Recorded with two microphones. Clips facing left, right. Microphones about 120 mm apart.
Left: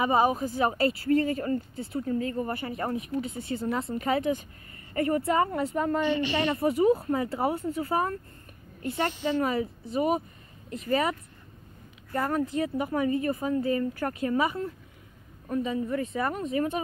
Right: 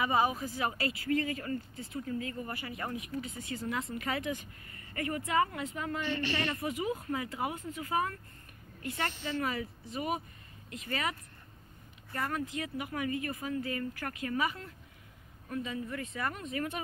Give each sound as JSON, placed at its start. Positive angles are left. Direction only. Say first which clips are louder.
{"t": 0.0, "sound": "speech", "louder": "left 6 dB", "side_deg": 40}
{"t": 0.6, "sound": "speech", "louder": "left 9 dB", "side_deg": 30}
{"t": 6.0, "sound": "a woman's voice", "louder": "left 7 dB", "side_deg": 15}
{"t": 6.6, "sound": "speech", "louder": "left 12 dB", "side_deg": 35}
{"t": 9.1, "sound": "a woman's voice", "louder": "left 9 dB", "side_deg": 20}
{"t": 9.4, "sound": "speech", "louder": "left 6 dB", "side_deg": 30}
{"t": 10.7, "sound": "speech", "louder": "left 9 dB", "side_deg": 40}